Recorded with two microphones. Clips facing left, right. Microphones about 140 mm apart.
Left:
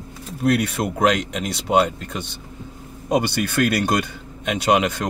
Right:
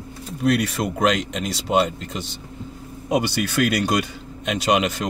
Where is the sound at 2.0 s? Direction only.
60° left (ahead or behind).